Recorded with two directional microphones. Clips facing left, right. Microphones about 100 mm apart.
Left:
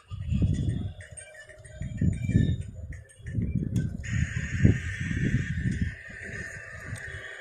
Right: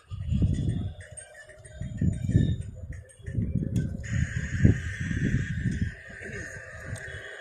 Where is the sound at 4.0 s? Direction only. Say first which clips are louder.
Even; 20° right (ahead or behind).